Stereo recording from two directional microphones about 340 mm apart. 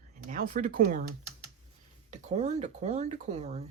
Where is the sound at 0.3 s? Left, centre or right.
Right.